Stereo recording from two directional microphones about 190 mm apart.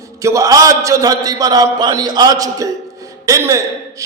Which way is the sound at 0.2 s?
15° right (ahead or behind).